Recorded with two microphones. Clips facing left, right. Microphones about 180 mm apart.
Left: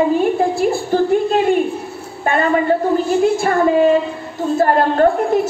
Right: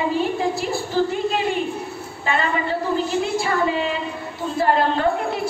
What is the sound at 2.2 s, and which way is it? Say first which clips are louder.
A woman's voice: left 8 dB; 50° left (ahead or behind).